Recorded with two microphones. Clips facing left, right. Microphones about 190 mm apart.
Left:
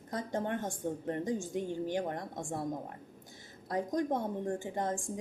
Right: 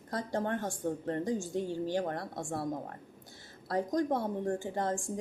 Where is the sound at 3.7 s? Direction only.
15° left (ahead or behind).